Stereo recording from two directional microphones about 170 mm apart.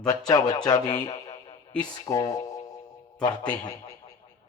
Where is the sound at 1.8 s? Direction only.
25° left (ahead or behind).